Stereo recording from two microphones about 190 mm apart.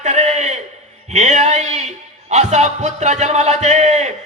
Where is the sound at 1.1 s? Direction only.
40° right (ahead or behind).